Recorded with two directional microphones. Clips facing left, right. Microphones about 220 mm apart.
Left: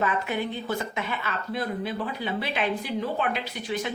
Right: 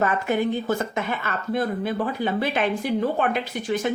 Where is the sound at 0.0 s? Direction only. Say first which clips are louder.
Right 5 dB; 45° right (ahead or behind).